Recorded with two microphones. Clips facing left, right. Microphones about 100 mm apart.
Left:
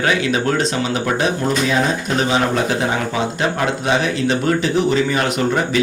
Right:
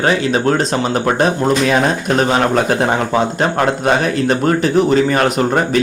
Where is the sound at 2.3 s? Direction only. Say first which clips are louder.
Right 1 dB; 55° right (ahead or behind).